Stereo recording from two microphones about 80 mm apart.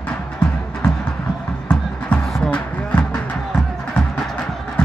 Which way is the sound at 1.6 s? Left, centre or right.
Centre.